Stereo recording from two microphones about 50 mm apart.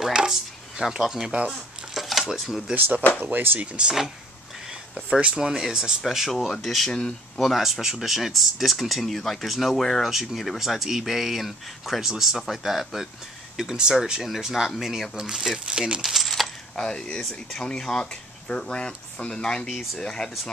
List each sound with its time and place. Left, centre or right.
0.1 s speech: centre
2.0 s a sound: centre
2.3 s speech: centre
2.7 s speech: right
4.9 s speech: right
6.0 s speech: centre
6.9 s speech: centre
7.3 s speech: centre
16.0 s coin: centre
16.7 s speech: centre